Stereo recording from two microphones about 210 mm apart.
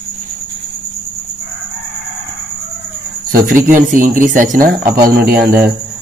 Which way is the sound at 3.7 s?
40° right (ahead or behind).